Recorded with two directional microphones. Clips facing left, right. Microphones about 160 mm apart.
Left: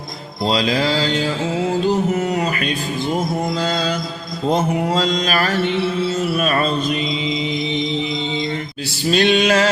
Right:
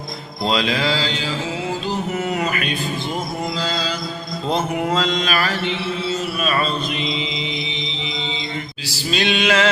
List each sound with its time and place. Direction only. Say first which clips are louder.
0.4 s mantra: left 2 dB; 35° left (ahead or behind)
2.4 s a sound: left 2 dB; 35° left (ahead or behind)
3.6 s mantra: left 4 dB; 50° left (ahead or behind)
4.5 s mantra: left 2 dB; 35° left (ahead or behind)
9.0 s mantra: left 5 dB; 45° left (ahead or behind)